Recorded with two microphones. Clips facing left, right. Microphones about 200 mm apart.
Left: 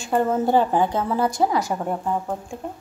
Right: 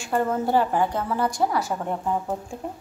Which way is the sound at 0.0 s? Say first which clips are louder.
Left 3 dB; 20° left (ahead or behind).